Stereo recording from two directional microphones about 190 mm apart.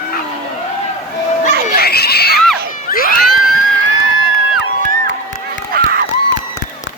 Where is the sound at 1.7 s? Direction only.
55° left (ahead or behind).